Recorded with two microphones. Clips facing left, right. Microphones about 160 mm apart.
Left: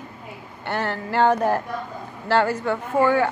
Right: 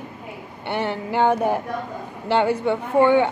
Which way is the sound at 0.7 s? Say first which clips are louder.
Even; 15° right (ahead or behind).